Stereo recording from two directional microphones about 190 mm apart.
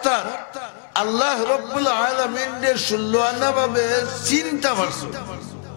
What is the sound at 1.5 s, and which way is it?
A man's voice, 15° left (ahead or behind).